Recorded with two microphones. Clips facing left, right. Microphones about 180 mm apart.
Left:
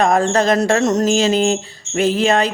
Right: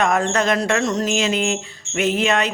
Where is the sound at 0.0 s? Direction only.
35° left (ahead or behind).